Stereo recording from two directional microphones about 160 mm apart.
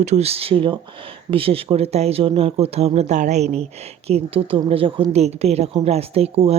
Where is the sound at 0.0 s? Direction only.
45° right (ahead or behind).